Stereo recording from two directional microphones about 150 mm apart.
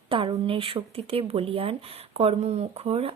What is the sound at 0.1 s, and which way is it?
Speech, 35° right (ahead or behind).